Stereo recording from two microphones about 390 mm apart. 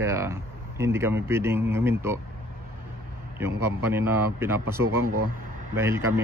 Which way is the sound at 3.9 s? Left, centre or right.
Centre.